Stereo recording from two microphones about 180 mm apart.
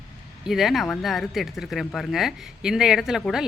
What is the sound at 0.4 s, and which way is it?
Speech, centre (ahead or behind).